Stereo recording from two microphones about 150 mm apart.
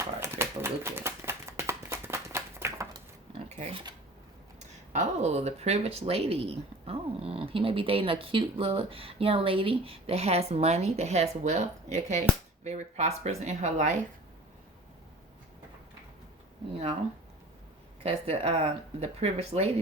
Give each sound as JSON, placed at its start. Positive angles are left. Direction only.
{"t": 0.2, "sound": "bird", "side_deg": -15}
{"t": 3.3, "sound": "a sound", "side_deg": -45}
{"t": 4.6, "sound": "speech", "side_deg": -50}
{"t": 18.0, "sound": "speech", "side_deg": -40}